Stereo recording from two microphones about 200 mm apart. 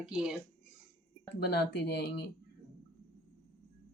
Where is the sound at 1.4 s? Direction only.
55° left (ahead or behind).